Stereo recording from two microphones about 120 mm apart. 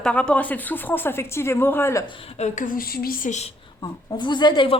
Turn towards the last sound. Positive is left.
turn(degrees=40)  # may be behind; listen again after turning